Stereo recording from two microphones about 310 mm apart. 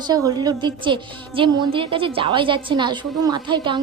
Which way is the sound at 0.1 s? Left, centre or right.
Centre.